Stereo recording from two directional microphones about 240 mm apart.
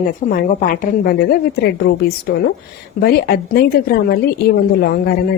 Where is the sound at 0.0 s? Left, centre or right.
Left.